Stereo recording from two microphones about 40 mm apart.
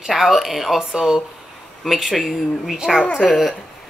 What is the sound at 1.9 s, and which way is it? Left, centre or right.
Speech, centre.